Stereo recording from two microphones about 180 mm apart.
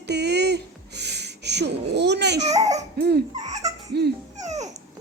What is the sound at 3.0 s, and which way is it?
Speech, 65° right (ahead or behind).